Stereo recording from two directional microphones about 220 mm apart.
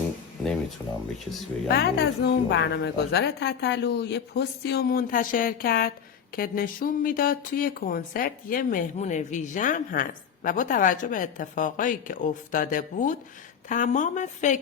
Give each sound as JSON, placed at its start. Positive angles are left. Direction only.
{"t": 1.6, "sound": "a woman's voice", "side_deg": 50}